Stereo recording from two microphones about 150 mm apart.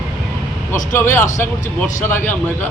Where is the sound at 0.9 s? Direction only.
15° left (ahead or behind).